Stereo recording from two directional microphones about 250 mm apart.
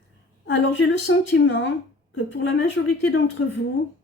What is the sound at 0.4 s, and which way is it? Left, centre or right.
Speech, left.